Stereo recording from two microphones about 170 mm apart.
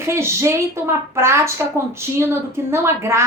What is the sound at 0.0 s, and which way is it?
A woman's voice, 15° right (ahead or behind).